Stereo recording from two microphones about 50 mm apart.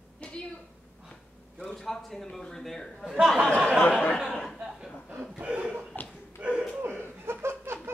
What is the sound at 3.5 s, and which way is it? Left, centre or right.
Speech, left.